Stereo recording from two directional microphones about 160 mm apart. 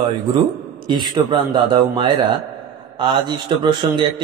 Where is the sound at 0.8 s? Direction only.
30° right (ahead or behind).